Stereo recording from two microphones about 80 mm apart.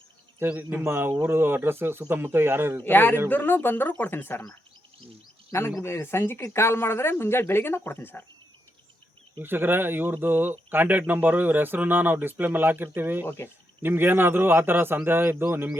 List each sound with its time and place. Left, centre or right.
0.3 s speech: right
2.8 s speech: left
5.5 s speech: left
9.4 s speech: right
13.2 s speech: left
13.8 s speech: right